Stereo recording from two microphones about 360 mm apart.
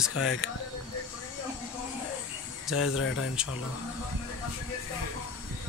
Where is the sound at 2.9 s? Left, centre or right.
Left.